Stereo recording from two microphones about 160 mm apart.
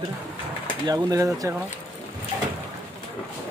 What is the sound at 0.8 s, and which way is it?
Speech, 20° right (ahead or behind).